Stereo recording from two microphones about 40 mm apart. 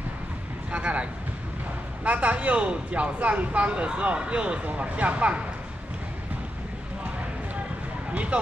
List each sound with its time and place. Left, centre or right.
0.7 s speech: right
2.0 s speech: right
8.1 s speech: right